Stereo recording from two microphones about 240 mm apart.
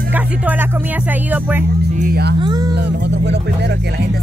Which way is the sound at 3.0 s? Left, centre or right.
Right.